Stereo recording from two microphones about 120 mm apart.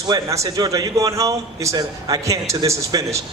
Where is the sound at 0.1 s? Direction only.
30° right (ahead or behind).